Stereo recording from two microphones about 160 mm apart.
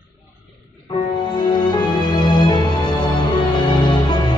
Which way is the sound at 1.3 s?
25° left (ahead or behind).